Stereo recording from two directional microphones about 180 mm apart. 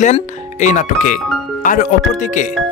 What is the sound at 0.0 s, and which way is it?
Speech, 45° left (ahead or behind).